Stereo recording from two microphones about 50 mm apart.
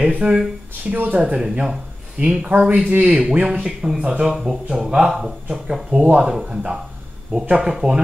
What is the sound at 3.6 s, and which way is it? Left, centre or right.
Speech, centre.